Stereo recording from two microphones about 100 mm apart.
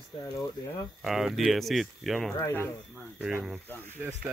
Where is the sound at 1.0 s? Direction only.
Centre (ahead or behind).